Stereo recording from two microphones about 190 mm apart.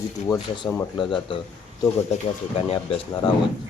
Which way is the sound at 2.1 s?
35° left (ahead or behind).